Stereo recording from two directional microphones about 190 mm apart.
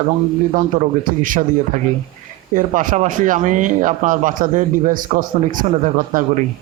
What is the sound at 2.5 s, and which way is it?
A man's voice, 45° right (ahead or behind).